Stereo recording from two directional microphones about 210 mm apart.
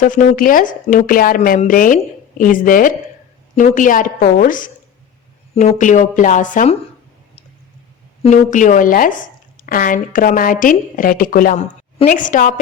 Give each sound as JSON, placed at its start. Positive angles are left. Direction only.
{"t": 0.0, "sound": "speech", "side_deg": 40}
{"t": 8.2, "sound": "speech", "side_deg": 35}